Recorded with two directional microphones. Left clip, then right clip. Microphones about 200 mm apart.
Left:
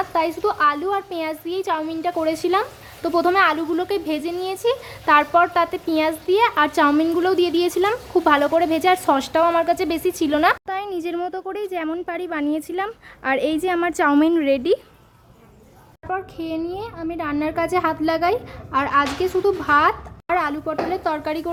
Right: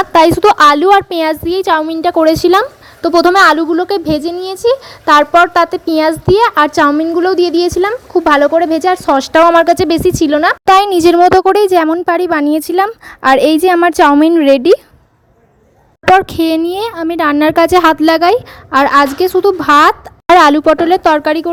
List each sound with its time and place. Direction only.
0.0 s a woman's voice: 50° right (ahead or behind); by 10.6 s 30° right (ahead or behind)
10.7 s a woman's voice: 60° right (ahead or behind)
16.1 s speech: 55° right (ahead or behind)